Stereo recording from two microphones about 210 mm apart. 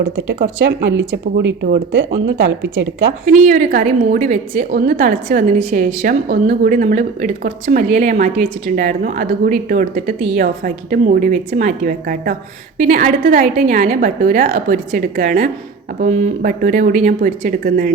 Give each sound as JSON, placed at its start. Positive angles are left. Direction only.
{"t": 0.9, "sound": "speech", "side_deg": -55}
{"t": 3.4, "sound": "a woman's voice", "side_deg": -40}